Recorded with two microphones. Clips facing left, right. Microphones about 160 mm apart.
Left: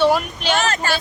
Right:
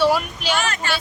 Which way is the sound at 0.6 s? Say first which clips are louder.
Left 3 dB; 40° left (ahead or behind).